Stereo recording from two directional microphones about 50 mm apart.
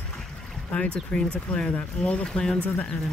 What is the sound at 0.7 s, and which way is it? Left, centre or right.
Speech, centre.